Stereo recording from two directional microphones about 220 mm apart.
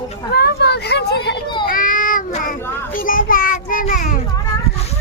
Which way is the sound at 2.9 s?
40° left (ahead or behind).